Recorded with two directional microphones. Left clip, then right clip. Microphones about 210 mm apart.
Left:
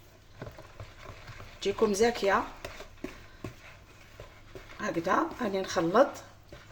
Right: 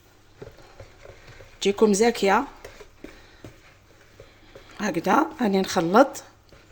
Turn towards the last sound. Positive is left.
turn(degrees=-45)  # may be behind; listen again after turning